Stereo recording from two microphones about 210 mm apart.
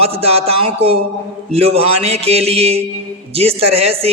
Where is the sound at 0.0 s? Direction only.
30° right (ahead or behind).